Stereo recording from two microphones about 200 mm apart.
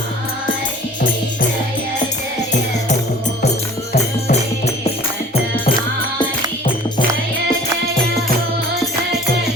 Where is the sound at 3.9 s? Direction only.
30° left (ahead or behind).